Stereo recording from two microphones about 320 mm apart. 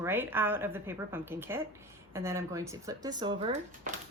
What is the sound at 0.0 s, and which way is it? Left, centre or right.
Speech, centre.